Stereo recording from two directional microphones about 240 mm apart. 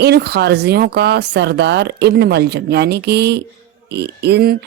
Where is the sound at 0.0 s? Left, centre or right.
Right.